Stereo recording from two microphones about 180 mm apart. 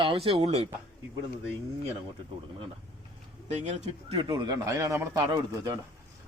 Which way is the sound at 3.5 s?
40° right (ahead or behind).